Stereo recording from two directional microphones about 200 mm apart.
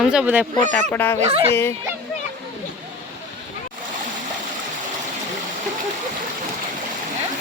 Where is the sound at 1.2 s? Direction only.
30° right (ahead or behind).